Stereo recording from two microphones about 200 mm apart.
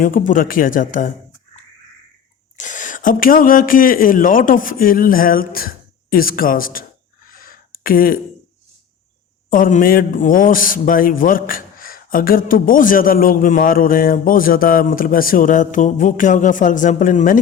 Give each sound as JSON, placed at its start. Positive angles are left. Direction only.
{"t": 0.0, "sound": "a man's voice", "side_deg": 45}
{"t": 2.6, "sound": "speech", "side_deg": 40}
{"t": 7.3, "sound": "a sound", "side_deg": 45}
{"t": 9.5, "sound": "a man's voice", "side_deg": 40}